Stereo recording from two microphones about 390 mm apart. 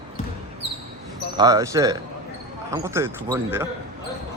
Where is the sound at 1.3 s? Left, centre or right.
Centre.